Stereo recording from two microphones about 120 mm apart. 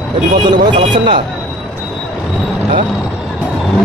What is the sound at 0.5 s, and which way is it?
Speech, 40° right (ahead or behind).